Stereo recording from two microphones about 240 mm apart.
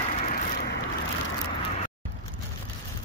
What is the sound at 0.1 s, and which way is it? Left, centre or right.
Vehicle, left.